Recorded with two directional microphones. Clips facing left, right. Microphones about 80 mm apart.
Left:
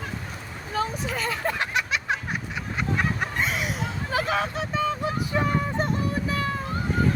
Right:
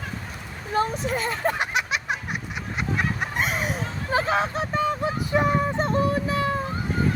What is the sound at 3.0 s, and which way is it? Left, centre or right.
Chicken, centre.